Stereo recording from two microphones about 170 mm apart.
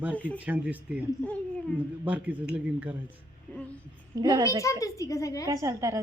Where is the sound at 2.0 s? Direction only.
10° right (ahead or behind).